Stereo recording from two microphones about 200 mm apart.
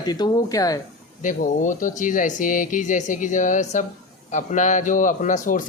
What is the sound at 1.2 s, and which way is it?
A man's voice, 40° left (ahead or behind).